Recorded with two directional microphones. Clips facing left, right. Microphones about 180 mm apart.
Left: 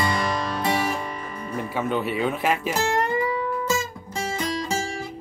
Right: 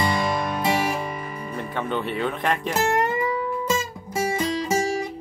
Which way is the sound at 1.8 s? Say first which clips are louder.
Left 1 dB; 5° left (ahead or behind).